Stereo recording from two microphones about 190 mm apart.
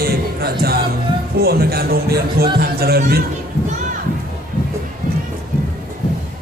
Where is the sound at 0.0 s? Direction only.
55° right (ahead or behind).